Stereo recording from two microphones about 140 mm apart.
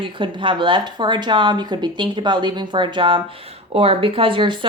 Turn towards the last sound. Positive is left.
turn(degrees=-35)  # may be behind; listen again after turning